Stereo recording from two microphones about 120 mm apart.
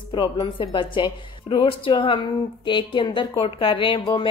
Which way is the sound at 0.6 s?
45° left (ahead or behind).